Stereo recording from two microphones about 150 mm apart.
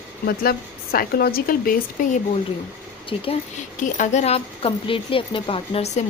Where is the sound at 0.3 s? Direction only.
90° left; by 2.0 s 75° left (ahead or behind).